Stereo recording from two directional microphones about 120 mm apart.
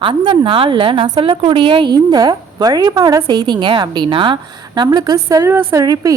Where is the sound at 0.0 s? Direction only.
45° right (ahead or behind).